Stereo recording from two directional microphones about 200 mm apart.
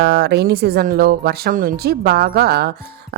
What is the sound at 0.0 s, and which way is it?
Speech, 55° right (ahead or behind).